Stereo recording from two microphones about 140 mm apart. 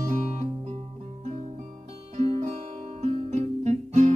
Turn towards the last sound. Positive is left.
turn(degrees=-50)  # may be behind; listen again after turning